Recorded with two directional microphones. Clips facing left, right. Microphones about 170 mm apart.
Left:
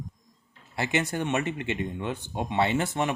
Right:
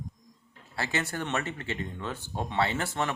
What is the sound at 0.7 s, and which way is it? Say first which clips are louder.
Speech: left 4 dB; 20° left (ahead or behind).